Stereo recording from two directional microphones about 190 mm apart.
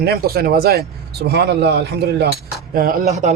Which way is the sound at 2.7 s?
50° right (ahead or behind).